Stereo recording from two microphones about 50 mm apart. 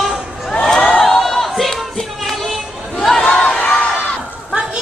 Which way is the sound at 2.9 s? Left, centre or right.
Centre.